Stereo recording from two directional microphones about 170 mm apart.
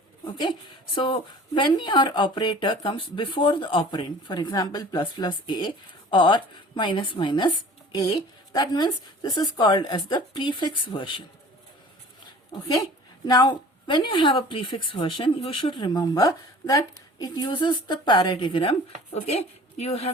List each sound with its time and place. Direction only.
0.9 s a woman's voice: 30° left (ahead or behind)
8.5 s a woman's voice: 25° left (ahead or behind)
13.2 s a woman's voice: 25° left (ahead or behind)